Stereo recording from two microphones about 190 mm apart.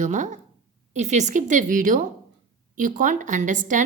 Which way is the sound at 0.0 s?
40° right (ahead or behind).